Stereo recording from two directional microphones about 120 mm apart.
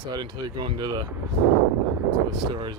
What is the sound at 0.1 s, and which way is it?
Speech, 35° right (ahead or behind).